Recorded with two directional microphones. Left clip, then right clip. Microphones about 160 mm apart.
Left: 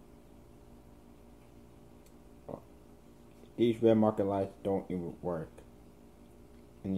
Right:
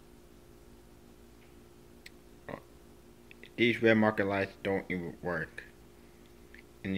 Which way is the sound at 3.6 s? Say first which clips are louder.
Right 1 dB; 10° left (ahead or behind).